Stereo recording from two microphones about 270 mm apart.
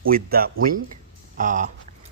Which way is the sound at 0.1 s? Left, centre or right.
Right.